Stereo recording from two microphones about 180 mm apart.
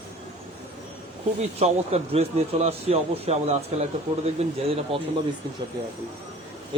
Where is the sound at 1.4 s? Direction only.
35° right (ahead or behind).